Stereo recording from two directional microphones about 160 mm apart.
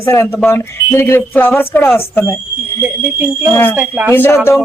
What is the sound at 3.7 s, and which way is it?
Speech, 10° right (ahead or behind).